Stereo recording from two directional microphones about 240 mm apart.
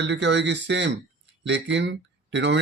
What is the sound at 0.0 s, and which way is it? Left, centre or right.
Speech, right.